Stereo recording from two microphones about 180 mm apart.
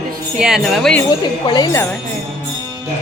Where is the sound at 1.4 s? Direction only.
20° left (ahead or behind).